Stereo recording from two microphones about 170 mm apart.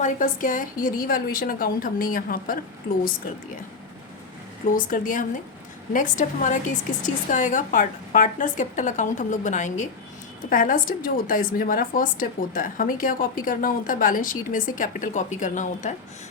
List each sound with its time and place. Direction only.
0.0 s a woman's voice: 50° left (ahead or behind)
4.6 s a woman's voice: 50° left (ahead or behind)